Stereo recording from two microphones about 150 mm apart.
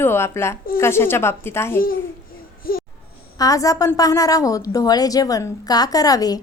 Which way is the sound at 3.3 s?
25° left (ahead or behind).